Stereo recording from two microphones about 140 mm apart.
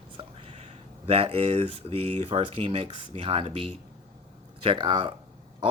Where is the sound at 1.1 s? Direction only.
45° right (ahead or behind).